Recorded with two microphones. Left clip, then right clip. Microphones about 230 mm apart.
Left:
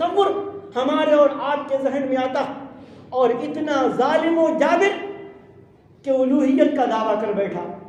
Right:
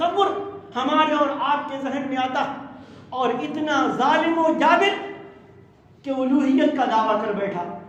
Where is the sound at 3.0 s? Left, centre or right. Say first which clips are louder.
Left 4 dB; centre.